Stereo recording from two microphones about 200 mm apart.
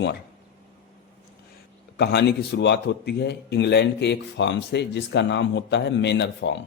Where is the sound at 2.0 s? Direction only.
55° left (ahead or behind).